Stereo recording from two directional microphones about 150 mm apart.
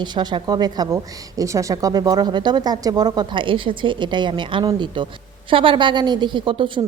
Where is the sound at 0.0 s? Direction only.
30° right (ahead or behind).